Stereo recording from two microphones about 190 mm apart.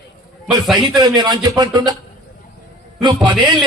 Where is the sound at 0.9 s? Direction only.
20° right (ahead or behind).